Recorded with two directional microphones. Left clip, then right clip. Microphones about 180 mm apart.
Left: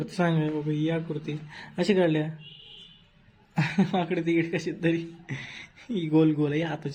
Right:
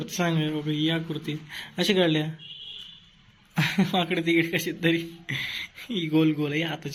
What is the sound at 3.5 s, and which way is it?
Speech, 10° left (ahead or behind).